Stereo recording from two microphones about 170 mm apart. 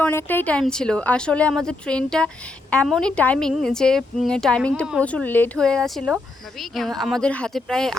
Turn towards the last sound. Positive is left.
turn(degrees=5)  # may be behind; listen again after turning